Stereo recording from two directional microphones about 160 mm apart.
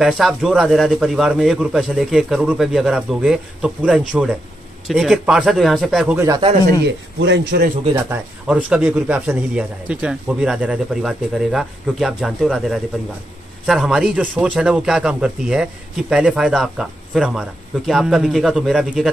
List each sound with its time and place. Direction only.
0.0 s speech: centre (ahead or behind)
6.1 s speech: 20° right (ahead or behind)
6.8 s speech: 85° right
7.9 s speech: 10° right (ahead or behind)